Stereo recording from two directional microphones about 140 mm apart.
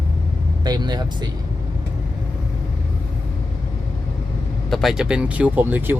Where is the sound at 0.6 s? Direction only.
30° right (ahead or behind).